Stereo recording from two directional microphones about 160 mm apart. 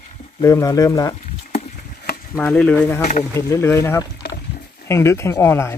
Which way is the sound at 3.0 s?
50° left (ahead or behind).